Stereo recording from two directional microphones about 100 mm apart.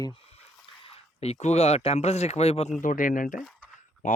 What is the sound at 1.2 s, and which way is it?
Speech, 90° left.